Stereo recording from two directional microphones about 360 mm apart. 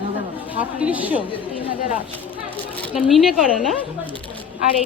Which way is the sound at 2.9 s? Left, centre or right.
Centre.